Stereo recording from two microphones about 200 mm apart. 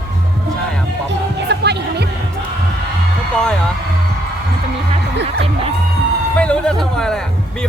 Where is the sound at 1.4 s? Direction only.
55° right (ahead or behind).